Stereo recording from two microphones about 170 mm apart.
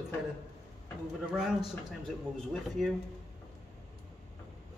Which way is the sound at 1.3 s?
5° right (ahead or behind).